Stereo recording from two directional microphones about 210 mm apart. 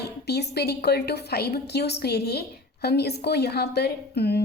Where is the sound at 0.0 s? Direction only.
50° left (ahead or behind).